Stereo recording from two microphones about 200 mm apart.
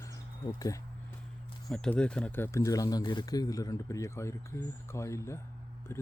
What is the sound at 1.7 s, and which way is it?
Speech, 5° left (ahead or behind).